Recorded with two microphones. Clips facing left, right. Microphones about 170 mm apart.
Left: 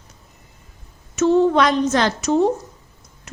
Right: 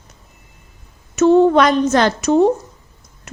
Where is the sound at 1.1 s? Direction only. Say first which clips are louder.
Right 4 dB; 55° right (ahead or behind).